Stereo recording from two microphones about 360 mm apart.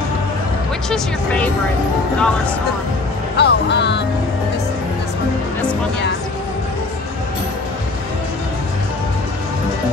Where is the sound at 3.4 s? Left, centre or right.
Left.